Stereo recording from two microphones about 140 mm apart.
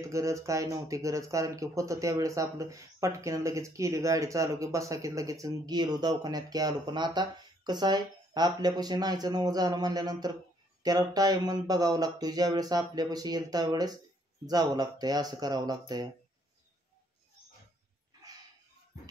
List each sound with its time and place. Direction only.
0.0 s speech: 20° right (ahead or behind)